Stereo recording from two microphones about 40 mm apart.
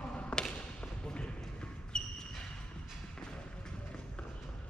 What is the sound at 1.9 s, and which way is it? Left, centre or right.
Basketball bounce, left.